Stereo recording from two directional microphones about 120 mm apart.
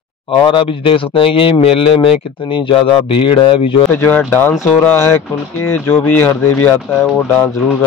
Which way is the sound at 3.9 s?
15° left (ahead or behind).